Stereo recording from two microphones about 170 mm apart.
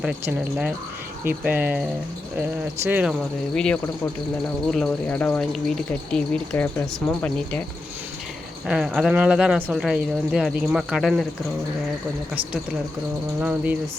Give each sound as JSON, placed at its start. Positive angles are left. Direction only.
{"t": 0.0, "sound": "speech", "side_deg": -5}
{"t": 3.5, "sound": "speech", "side_deg": 5}
{"t": 8.6, "sound": "speech", "side_deg": -5}
{"t": 13.4, "sound": "speech", "side_deg": -5}